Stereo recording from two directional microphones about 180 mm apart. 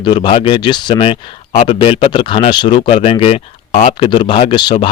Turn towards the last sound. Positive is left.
turn(degrees=25)  # may be behind; listen again after turning